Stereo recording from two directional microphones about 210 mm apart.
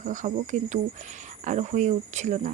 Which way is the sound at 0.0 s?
35° right (ahead or behind).